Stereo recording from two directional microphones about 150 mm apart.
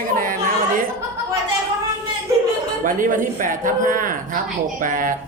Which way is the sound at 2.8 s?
60° right (ahead or behind).